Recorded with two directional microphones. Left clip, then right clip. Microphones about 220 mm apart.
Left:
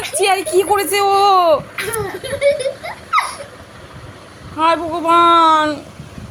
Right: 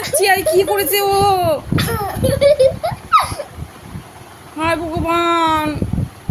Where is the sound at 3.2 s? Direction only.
25° right (ahead or behind).